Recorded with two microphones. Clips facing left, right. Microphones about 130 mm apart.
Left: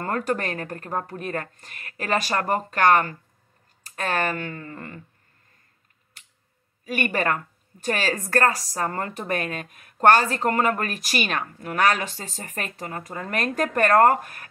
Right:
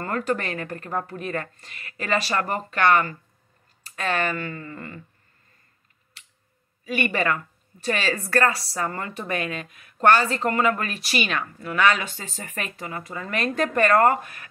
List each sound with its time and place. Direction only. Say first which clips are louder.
0.0 s speech: even; 40° left (ahead or behind)
6.8 s speech: even; 45° left (ahead or behind)